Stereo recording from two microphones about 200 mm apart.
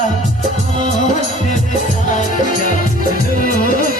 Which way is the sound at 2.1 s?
40° left (ahead or behind).